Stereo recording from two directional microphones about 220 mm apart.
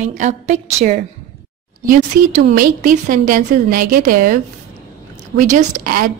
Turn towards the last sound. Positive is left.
turn(degrees=-40)  # may be behind; listen again after turning